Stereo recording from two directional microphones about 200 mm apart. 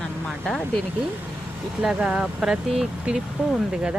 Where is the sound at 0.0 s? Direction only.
5° left (ahead or behind).